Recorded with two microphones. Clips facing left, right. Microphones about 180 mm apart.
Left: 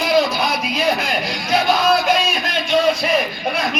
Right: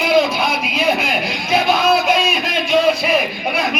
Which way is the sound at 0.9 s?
5° right (ahead or behind).